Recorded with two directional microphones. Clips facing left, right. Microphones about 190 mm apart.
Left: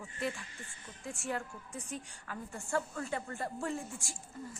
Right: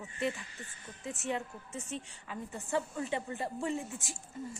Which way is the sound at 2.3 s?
20° right (ahead or behind).